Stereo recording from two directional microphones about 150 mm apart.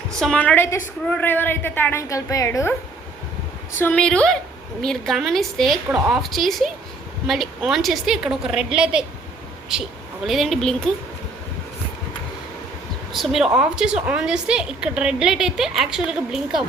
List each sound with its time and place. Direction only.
0.2 s a woman's voice: 5° left (ahead or behind)
3.8 s a woman's voice: 10° left (ahead or behind)
13.1 s a woman's voice: centre (ahead or behind)